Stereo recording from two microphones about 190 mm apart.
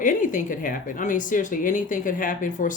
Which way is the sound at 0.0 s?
45° left (ahead or behind).